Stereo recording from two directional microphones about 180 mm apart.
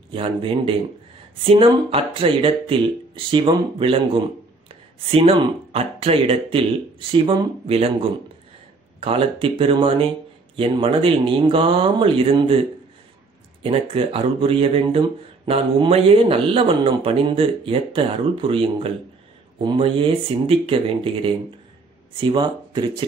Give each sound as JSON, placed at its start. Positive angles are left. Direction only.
{"t": 0.1, "sound": "speech", "side_deg": -30}